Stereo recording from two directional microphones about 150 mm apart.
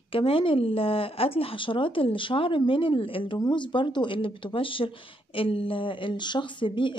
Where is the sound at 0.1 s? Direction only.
35° left (ahead or behind).